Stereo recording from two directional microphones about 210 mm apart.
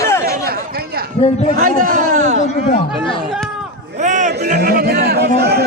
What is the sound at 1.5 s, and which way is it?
Speech, 40° right (ahead or behind).